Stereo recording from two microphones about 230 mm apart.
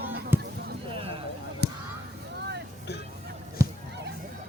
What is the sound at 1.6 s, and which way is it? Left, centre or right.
Honk, right.